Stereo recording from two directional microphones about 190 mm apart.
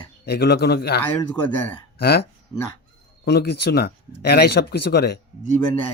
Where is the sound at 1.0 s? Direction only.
10° left (ahead or behind).